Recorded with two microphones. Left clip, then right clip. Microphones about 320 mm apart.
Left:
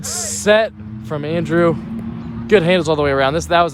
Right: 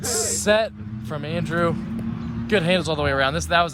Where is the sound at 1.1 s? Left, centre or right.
Left.